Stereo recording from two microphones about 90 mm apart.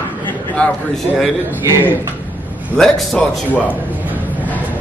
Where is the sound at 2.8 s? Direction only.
15° left (ahead or behind).